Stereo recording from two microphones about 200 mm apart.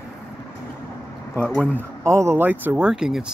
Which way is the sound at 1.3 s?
5° left (ahead or behind).